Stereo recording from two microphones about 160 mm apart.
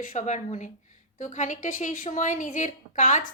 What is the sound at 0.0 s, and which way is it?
A woman's voice, 50° left (ahead or behind).